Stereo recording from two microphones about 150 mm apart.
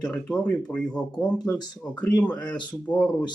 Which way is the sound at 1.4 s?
25° left (ahead or behind).